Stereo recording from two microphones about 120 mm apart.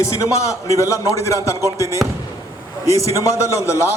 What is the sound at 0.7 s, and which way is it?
A man's voice, 25° left (ahead or behind).